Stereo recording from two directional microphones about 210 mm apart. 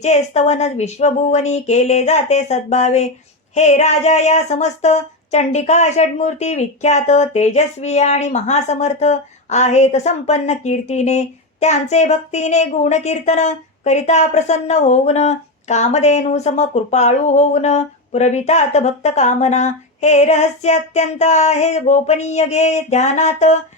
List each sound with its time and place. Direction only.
0.0 s speech: 30° left (ahead or behind)